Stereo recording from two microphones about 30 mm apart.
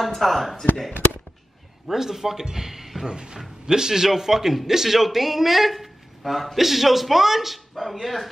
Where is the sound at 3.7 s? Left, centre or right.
Right.